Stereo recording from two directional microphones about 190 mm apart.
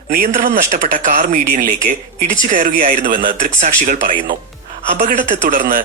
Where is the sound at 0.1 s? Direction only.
50° right (ahead or behind).